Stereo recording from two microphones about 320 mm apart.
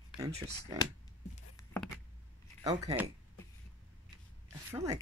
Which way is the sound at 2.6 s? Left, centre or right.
Centre.